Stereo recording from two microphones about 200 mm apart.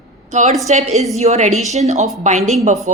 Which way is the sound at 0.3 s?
35° right (ahead or behind).